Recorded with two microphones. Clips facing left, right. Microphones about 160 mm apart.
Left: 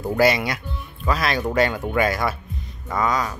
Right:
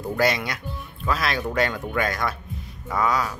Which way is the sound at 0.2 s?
5° left (ahead or behind).